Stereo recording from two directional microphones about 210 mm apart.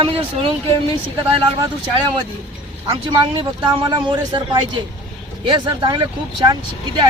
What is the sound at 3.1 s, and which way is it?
Speech, 20° right (ahead or behind).